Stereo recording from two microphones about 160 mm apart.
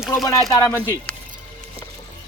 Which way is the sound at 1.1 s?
5° left (ahead or behind).